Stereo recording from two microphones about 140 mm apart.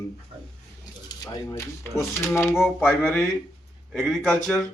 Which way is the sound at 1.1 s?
30° left (ahead or behind).